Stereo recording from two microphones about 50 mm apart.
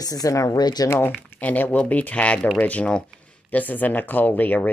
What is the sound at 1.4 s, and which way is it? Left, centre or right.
Speech, left.